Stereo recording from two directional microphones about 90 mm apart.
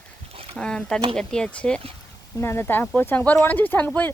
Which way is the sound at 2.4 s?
30° left (ahead or behind).